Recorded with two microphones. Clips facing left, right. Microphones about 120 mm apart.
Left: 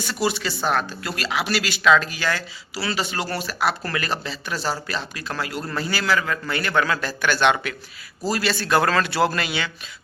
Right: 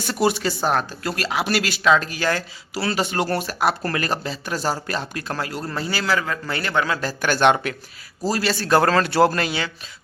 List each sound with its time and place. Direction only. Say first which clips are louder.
0.0 s a man's voice: right 4 dB; 50° right (ahead or behind); by 7.0 s 25° right (ahead or behind)
7.0 s speech: right 2 dB; 40° right (ahead or behind)